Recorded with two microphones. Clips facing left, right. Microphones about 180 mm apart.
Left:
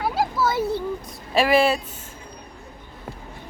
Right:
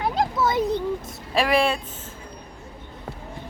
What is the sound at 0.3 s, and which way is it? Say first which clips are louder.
Children playing: right 1 dB; 20° right (ahead or behind).